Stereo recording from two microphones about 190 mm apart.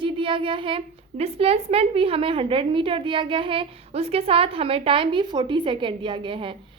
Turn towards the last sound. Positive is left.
turn(degrees=-25)  # may be behind; listen again after turning